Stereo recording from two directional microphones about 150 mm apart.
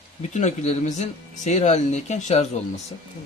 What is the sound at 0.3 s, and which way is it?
Speech, 50° left (ahead or behind).